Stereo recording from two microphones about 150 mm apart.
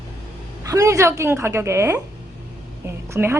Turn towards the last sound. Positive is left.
turn(degrees=-15)  # may be behind; listen again after turning